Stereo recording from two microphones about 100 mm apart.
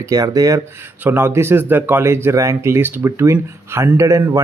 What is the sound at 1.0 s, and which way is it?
Speech, 25° right (ahead or behind).